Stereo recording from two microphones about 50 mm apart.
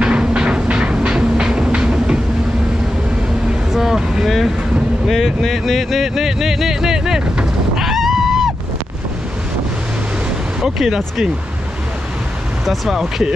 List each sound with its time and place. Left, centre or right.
0.0 s a sound: centre
3.7 s vehicle: centre
5.0 s music: centre
7.8 s a sound: centre
10.6 s speech: centre
12.6 s speech: centre